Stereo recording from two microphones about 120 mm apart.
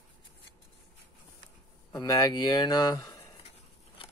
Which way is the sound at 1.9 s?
30° left (ahead or behind).